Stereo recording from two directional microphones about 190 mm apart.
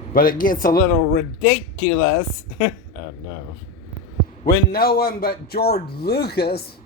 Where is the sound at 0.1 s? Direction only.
50° left (ahead or behind).